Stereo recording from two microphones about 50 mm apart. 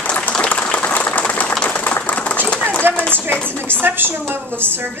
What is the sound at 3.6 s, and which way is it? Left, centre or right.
A woman's voice, right.